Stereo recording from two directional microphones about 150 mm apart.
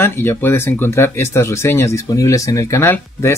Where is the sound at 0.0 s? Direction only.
15° left (ahead or behind).